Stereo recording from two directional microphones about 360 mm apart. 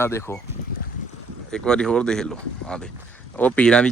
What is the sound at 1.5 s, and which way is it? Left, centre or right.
Speech, centre.